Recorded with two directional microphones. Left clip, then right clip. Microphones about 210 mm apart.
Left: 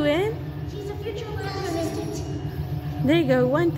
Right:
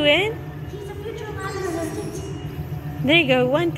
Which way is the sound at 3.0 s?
10° left (ahead or behind).